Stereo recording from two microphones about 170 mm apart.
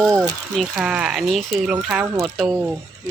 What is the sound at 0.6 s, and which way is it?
Speech, 5° right (ahead or behind).